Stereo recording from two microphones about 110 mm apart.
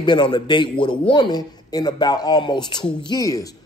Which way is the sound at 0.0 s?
45° left (ahead or behind).